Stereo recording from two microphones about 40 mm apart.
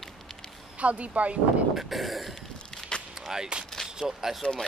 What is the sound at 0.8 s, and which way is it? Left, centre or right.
Speech, right.